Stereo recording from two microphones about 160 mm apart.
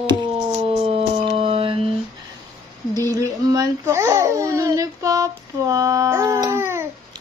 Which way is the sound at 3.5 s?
20° right (ahead or behind).